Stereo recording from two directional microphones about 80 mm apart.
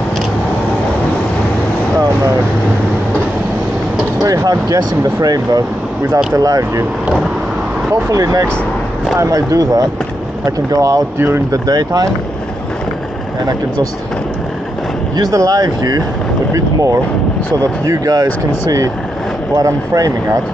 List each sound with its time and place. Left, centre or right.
4.2 s speech: right
7.9 s speech: right
11.1 s speech: right
11.5 s speech: right
15.3 s speech: right
16.5 s speech: right